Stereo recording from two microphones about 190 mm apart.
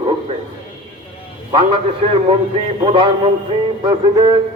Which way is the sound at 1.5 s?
25° right (ahead or behind).